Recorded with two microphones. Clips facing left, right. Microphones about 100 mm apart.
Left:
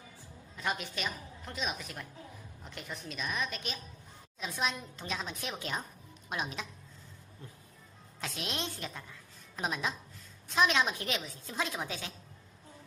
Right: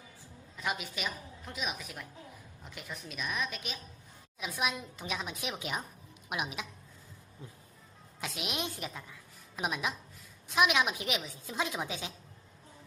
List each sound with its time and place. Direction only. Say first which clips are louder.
0.5 s a woman's voice: left 1 dB; 5° right (ahead or behind)
8.2 s a woman's voice: right 1 dB; 10° right (ahead or behind)
11.5 s a woman's voice: right 1 dB; 15° right (ahead or behind)